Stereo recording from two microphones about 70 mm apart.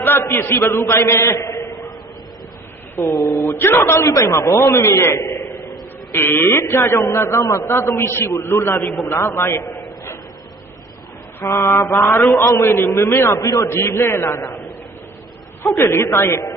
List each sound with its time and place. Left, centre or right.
0.0 s a man's voice: left
2.9 s a man's voice: left
4.1 s a man's voice: left
11.3 s a man's voice: left
12.4 s a man's voice: left
12.6 s a man's voice: left
15.6 s a woman's voice: left